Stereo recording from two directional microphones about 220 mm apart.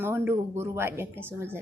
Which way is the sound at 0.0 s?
10° right (ahead or behind).